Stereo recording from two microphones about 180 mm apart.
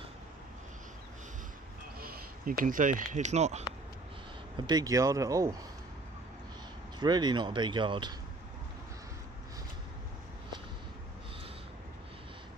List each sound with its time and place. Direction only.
2.0 s speech: 55° right (ahead or behind)
4.5 s speech: 25° right (ahead or behind)
7.0 s speech: 25° right (ahead or behind)